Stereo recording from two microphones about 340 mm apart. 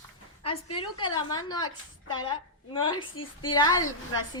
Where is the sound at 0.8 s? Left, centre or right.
Centre.